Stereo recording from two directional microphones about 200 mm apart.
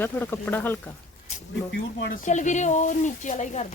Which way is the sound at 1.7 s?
55° left (ahead or behind).